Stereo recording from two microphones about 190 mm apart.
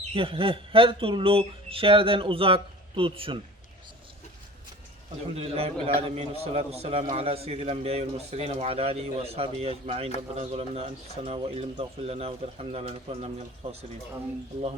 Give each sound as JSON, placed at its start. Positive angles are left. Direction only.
{"t": 0.1, "sound": "speech", "side_deg": -30}
{"t": 5.3, "sound": "speech", "side_deg": -30}